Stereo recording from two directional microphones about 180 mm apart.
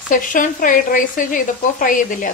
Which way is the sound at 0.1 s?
45° left (ahead or behind).